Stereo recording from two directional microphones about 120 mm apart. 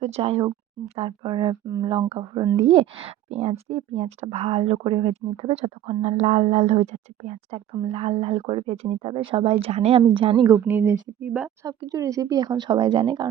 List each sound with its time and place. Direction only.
0.0 s speech: 60° right (ahead or behind); by 1.5 s 40° right (ahead or behind)
1.6 s speech: 30° right (ahead or behind)
2.0 s speech: 40° right (ahead or behind); by 9.1 s 60° right (ahead or behind)
9.1 s speech: 50° right (ahead or behind)
10.5 s speech: 15° right (ahead or behind)
11.6 s speech: 30° right (ahead or behind)